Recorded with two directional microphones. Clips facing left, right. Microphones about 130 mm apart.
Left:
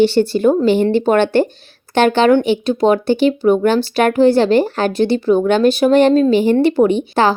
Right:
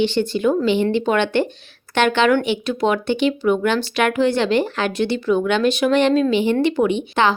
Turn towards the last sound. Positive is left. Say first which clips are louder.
# left 4 dB
turn(degrees=40)  # may be behind; listen again after turning